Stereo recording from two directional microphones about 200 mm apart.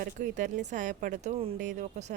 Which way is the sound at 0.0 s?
40° right (ahead or behind).